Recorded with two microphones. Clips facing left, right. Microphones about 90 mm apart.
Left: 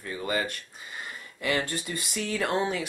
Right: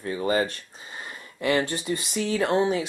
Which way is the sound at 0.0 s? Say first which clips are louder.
Right 6 dB; 30° right (ahead or behind).